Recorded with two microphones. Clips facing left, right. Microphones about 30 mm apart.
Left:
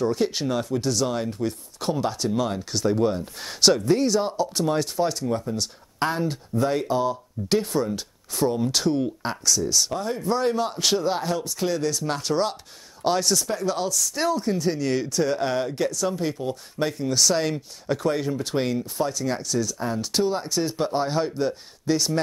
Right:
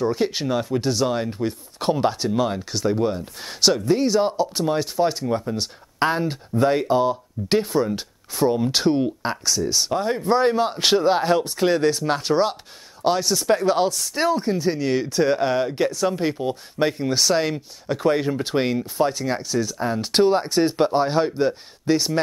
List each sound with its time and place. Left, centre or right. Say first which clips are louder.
0.0 s speech: right 1 dB; centre
2.2 s speech: right 3 dB; centre
4.1 s speech: right 3 dB; centre
9.0 s speech: right 2 dB; centre; by 12.0 s right
12.0 s speech: right 4 dB; right
13.6 s speech: right 5 dB; right
14.3 s speech: right 2 dB; right
15.4 s speech: right 4 dB; centre
15.7 s speech: right 3 dB; right
20.1 s speech: right 7 dB; right
20.3 s speech: right 6 dB; right
20.9 s speech: right 4 dB; centre